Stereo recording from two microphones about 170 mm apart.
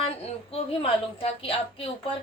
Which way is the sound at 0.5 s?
35° left (ahead or behind).